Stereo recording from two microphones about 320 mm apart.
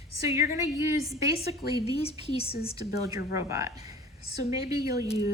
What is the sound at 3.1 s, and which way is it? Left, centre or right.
A woman's voice, centre.